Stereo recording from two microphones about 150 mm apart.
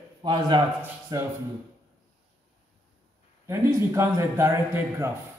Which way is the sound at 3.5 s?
20° right (ahead or behind).